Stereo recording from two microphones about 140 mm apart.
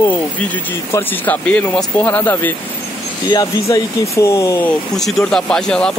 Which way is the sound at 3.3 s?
25° left (ahead or behind).